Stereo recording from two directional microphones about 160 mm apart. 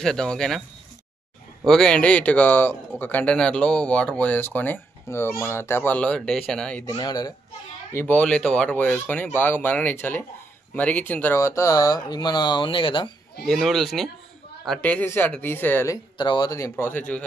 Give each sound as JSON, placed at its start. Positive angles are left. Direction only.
{"t": 0.0, "sound": "speech", "side_deg": 5}
{"t": 6.9, "sound": "speech", "side_deg": 25}
{"t": 7.9, "sound": "speech", "side_deg": 10}
{"t": 13.5, "sound": "speech", "side_deg": 0}